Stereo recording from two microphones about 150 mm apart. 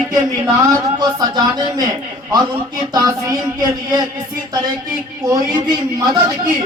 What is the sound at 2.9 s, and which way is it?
A man's voice, 25° right (ahead or behind).